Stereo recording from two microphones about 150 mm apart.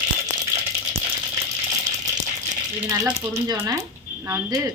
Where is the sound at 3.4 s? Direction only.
20° right (ahead or behind).